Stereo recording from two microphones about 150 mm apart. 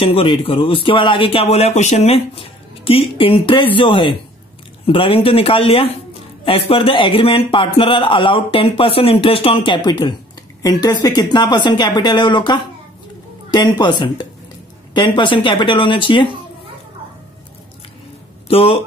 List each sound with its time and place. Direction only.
0.0 s a man's voice: 35° left (ahead or behind)
18.5 s a man's voice: 40° left (ahead or behind)